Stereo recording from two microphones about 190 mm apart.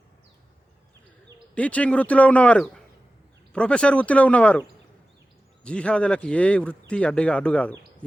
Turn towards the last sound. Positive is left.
turn(degrees=5)  # may be behind; listen again after turning